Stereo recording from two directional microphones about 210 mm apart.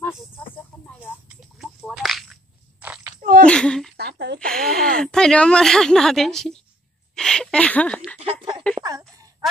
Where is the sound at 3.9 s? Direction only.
50° right (ahead or behind).